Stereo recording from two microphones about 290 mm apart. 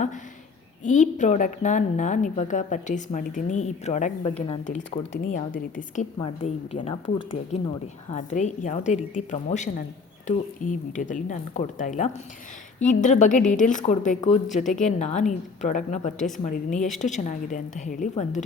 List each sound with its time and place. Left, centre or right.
0.9 s a woman's voice: left
8.1 s a woman's voice: left